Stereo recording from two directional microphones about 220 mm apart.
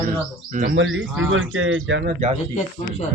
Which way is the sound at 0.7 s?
60° right (ahead or behind).